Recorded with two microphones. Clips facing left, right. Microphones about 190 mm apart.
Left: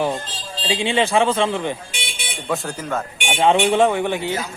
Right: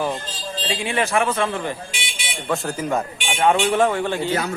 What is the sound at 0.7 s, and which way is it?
Speech, 25° left (ahead or behind).